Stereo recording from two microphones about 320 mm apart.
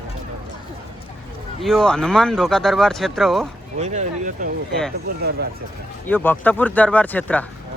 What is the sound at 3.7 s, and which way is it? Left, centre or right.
Speech, right.